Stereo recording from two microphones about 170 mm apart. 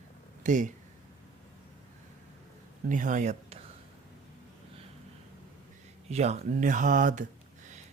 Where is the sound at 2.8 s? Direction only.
50° right (ahead or behind).